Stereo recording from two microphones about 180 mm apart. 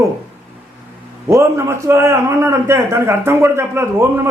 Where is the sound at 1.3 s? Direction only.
15° right (ahead or behind).